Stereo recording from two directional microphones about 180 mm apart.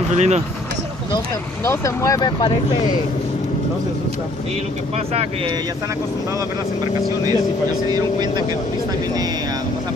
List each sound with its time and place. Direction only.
0.1 s speech: 40° right (ahead or behind)
1.7 s speech: 15° left (ahead or behind)
4.9 s speech: 35° right (ahead or behind)
7.9 s speech: 25° right (ahead or behind)